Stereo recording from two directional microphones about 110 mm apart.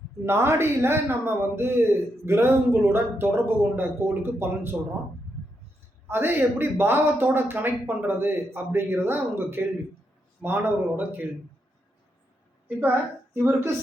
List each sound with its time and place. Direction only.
0.3 s a man's voice: 25° right (ahead or behind)
6.1 s a man's voice: 20° right (ahead or behind)
13.3 s a man's voice: 20° right (ahead or behind)